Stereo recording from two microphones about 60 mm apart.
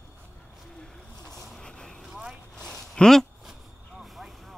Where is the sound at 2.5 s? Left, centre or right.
Centre.